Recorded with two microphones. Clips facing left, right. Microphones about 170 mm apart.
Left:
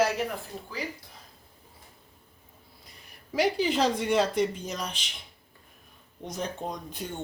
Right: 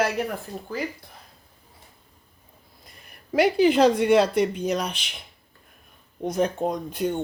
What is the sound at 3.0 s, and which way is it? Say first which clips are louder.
Speech: right 5 dB; 60° right (ahead or behind).